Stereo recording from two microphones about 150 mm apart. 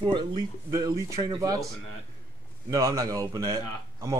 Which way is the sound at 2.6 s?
25° right (ahead or behind).